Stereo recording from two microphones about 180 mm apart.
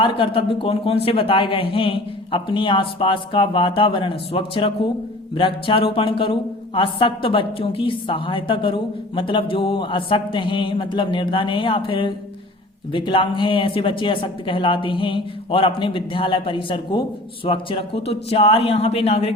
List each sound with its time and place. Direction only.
0.0 s a woman's voice: 30° left (ahead or behind)